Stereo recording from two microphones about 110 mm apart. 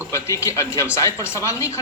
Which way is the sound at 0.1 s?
25° left (ahead or behind).